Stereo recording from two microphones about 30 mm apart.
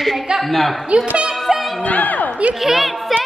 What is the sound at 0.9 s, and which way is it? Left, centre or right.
Speech, right.